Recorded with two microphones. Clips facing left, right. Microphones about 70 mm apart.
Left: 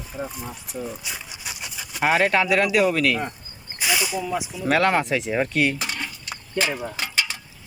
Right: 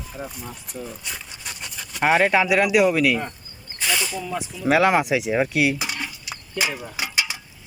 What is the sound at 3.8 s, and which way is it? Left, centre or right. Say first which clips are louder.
Speech: left 1 dB; centre.